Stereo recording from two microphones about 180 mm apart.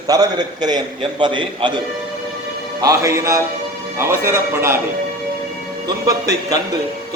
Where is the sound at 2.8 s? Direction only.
20° right (ahead or behind).